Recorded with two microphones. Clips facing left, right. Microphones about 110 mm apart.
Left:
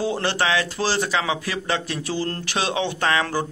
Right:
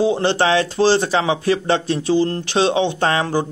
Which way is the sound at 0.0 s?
20° right (ahead or behind).